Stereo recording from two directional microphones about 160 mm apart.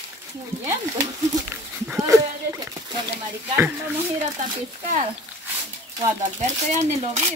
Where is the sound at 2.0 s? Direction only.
20° right (ahead or behind).